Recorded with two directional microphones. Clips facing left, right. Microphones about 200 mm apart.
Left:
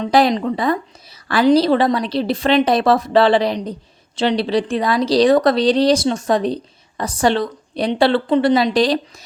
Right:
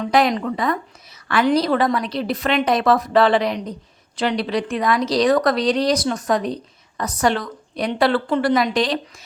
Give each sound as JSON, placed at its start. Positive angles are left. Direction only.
{"t": 0.0, "sound": "speech", "side_deg": 30}